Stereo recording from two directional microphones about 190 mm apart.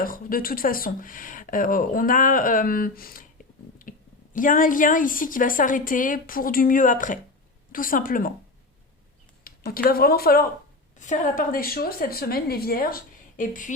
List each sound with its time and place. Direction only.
0.0 s a woman's voice: 50° left (ahead or behind)
9.4 s a woman's voice: 50° left (ahead or behind)
10.9 s a woman's voice: 40° left (ahead or behind)